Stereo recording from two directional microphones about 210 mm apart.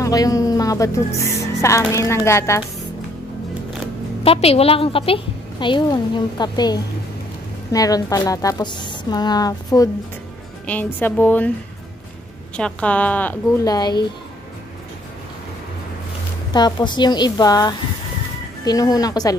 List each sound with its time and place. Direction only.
0.0 s speech: 15° left (ahead or behind)
4.2 s a woman's voice: 30° left (ahead or behind); by 11.5 s 10° left (ahead or behind)
12.5 s speech: 5° left (ahead or behind)
13.7 s a woman's voice: 20° left (ahead or behind)
16.5 s a woman's voice: 20° left (ahead or behind)